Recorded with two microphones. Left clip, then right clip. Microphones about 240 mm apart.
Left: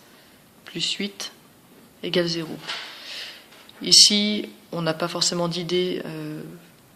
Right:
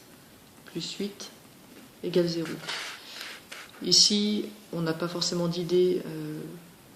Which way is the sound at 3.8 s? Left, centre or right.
Left.